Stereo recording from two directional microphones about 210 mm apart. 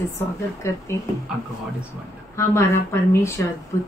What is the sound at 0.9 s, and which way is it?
Speech, 15° left (ahead or behind).